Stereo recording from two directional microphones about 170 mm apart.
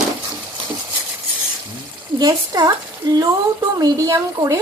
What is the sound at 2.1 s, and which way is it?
Speech, 25° right (ahead or behind).